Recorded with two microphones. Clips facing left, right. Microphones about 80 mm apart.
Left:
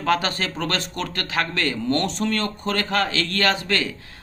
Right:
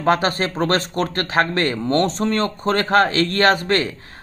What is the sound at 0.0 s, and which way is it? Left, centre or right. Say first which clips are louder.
Speech: right 4 dB; right.